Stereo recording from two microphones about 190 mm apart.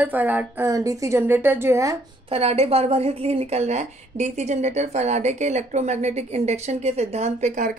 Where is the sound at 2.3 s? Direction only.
30° right (ahead or behind).